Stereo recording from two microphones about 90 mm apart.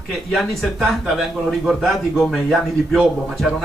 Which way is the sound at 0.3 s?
Centre (ahead or behind).